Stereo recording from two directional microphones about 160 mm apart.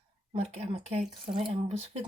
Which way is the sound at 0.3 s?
40° right (ahead or behind).